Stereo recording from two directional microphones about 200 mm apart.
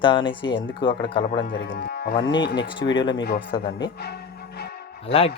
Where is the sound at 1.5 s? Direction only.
60° left (ahead or behind).